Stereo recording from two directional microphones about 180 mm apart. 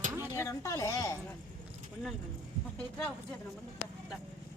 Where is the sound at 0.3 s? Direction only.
15° left (ahead or behind).